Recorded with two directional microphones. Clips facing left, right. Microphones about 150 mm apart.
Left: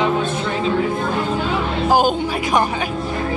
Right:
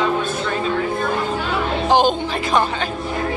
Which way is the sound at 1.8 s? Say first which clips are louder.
Even; 10° left (ahead or behind).